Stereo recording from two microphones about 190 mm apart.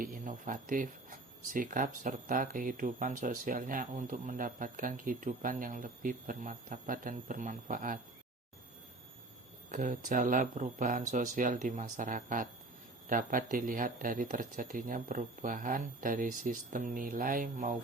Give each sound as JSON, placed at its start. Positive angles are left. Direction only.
{"t": 0.0, "sound": "speech", "side_deg": -45}
{"t": 9.7, "sound": "speech", "side_deg": -45}